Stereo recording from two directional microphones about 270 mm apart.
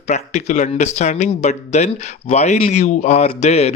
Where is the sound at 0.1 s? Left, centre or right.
Left.